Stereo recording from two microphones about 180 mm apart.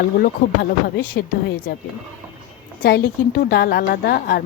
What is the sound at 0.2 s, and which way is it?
A woman's voice, 60° left (ahead or behind).